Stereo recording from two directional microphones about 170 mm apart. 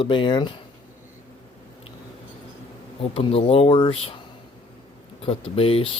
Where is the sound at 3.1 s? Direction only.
35° left (ahead or behind).